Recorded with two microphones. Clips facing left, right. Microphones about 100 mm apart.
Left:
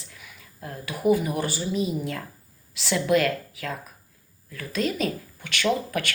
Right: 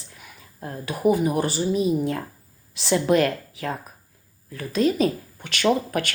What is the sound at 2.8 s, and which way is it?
A woman's voice, 30° right (ahead or behind).